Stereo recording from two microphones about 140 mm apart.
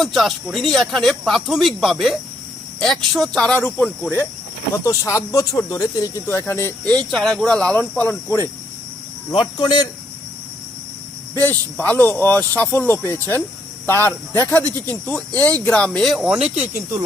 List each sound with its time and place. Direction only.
0.0 s speech: centre (ahead or behind)
4.7 s speech: 20° left (ahead or behind)
6.9 s speech: 5° left (ahead or behind)
9.3 s speech: 35° left (ahead or behind)
11.3 s speech: 15° left (ahead or behind); by 16.5 s 5° right (ahead or behind)